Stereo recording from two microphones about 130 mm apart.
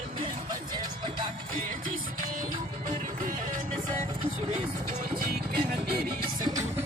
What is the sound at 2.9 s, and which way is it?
Music, 90° right.